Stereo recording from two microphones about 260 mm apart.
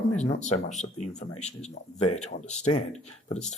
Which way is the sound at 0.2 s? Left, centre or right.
Left.